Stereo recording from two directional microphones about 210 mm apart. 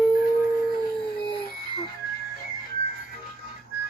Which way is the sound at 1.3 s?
25° left (ahead or behind).